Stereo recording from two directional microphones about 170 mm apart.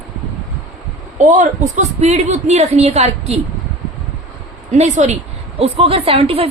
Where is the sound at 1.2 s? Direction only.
45° right (ahead or behind).